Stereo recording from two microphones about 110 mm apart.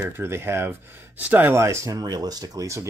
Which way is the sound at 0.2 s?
20° right (ahead or behind).